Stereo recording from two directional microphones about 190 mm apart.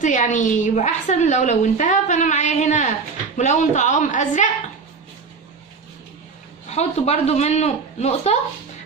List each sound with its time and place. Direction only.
0.0 s a woman's voice: 40° left (ahead or behind)
6.7 s a woman's voice: 35° left (ahead or behind)